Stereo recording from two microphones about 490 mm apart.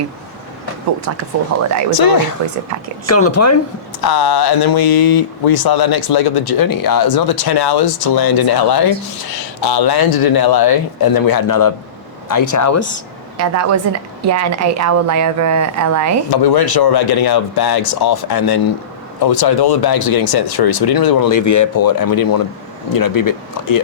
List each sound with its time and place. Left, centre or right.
2.0 s speech: left
3.1 s speech: left
4.0 s speech: left
13.3 s a woman's voice: right
16.3 s speech: left